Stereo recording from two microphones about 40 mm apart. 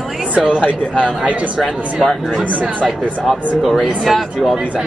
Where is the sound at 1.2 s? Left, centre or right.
Right.